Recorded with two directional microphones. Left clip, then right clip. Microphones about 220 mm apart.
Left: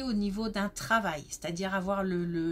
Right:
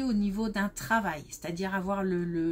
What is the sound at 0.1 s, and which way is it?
Speech, 30° left (ahead or behind).